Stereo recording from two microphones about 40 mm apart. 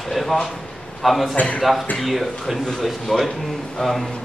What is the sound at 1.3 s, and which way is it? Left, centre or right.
Speech, left.